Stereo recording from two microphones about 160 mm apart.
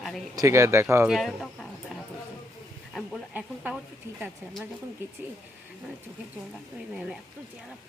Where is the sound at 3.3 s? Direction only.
10° right (ahead or behind).